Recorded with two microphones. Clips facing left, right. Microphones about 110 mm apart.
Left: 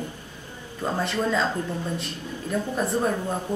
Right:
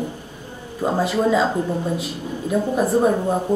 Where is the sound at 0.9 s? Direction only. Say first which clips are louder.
Right 6 dB; 5° right (ahead or behind).